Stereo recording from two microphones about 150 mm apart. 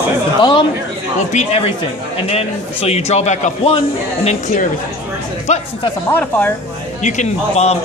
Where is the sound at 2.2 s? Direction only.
40° left (ahead or behind).